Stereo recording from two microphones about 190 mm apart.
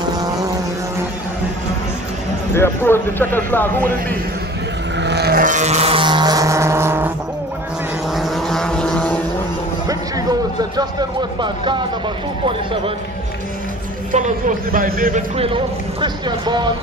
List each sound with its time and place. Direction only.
2.5 s speech: 10° left (ahead or behind)
4.9 s vehicle: 65° right (ahead or behind); by 7.1 s 10° right (ahead or behind)
8.1 s vehicle: centre (ahead or behind)
10.8 s speech: 20° right (ahead or behind)
14.1 s a man's voice: 45° right (ahead or behind)
15.3 s speech: 30° right (ahead or behind)